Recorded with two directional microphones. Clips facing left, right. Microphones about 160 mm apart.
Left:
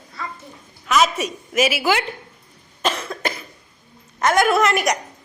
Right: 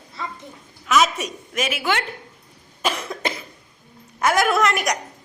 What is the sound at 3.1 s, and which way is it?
Cough, 25° right (ahead or behind).